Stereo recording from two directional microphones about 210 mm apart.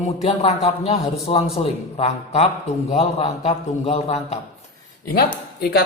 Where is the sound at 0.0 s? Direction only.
30° left (ahead or behind).